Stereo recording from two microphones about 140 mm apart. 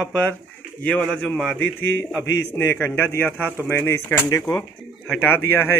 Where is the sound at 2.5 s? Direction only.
15° left (ahead or behind).